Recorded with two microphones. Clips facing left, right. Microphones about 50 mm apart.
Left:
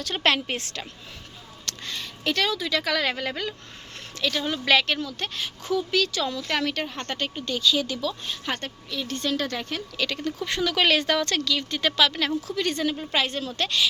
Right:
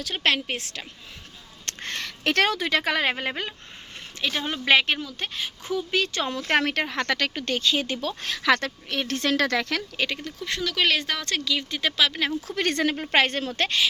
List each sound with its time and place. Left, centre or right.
0.0 s speech: centre
1.6 s music: right
2.0 s speech: right
4.9 s speech: centre
5.6 s speech: right
6.9 s speech: right
7.4 s speech: right
8.2 s speech: right
10.2 s speech: centre
12.5 s a woman's voice: right